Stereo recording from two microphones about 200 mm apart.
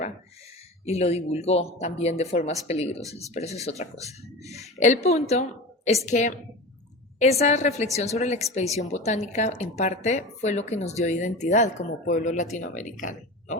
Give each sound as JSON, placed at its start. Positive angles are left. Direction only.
{"t": 0.9, "sound": "speech", "side_deg": 30}
{"t": 3.0, "sound": "speech", "side_deg": -15}
{"t": 3.2, "sound": "speech", "side_deg": 35}
{"t": 7.4, "sound": "speech", "side_deg": 35}